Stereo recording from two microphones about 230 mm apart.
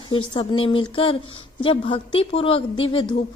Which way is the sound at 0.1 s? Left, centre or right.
Left.